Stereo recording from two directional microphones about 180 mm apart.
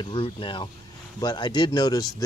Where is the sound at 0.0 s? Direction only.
30° left (ahead or behind).